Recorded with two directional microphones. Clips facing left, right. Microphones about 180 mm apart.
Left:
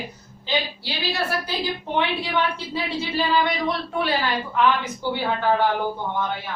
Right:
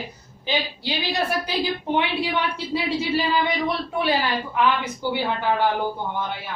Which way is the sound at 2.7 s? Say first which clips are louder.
Right 3 dB; 10° right (ahead or behind).